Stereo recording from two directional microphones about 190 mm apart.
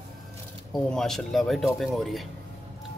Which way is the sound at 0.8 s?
Centre (ahead or behind).